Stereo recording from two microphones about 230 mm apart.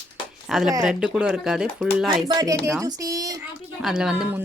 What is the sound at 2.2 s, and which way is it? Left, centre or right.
Speech, centre.